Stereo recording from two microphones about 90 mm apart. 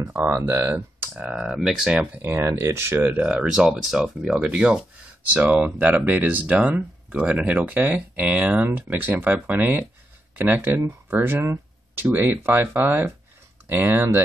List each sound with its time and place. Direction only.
0.3 s speech: 30° right (ahead or behind)
1.1 s speech: 10° right (ahead or behind)
1.9 s speech: 15° right (ahead or behind)
2.2 s speech: 25° right (ahead or behind)
3.2 s speech: 10° right (ahead or behind)
11.4 s a sound: 30° right (ahead or behind)
12.1 s speech: 25° right (ahead or behind)